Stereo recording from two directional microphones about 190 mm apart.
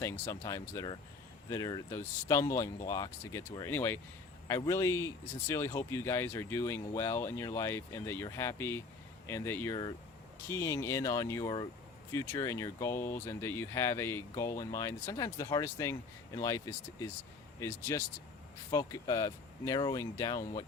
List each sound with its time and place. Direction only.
0.0 s speech: 15° left (ahead or behind)